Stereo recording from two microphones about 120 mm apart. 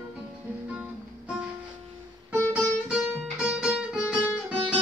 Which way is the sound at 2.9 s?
5° right (ahead or behind).